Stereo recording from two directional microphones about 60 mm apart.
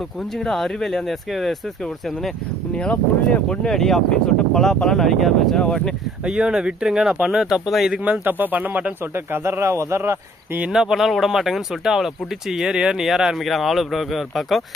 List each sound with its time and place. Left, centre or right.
0.0 s speech: centre
2.7 s speech: centre
5.5 s speech: centre
6.2 s speech: centre
7.9 s speech: centre
8.2 s speech: right
10.7 s speech: centre